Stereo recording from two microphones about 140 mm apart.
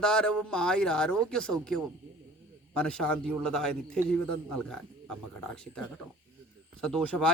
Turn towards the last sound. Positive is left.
turn(degrees=5)  # may be behind; listen again after turning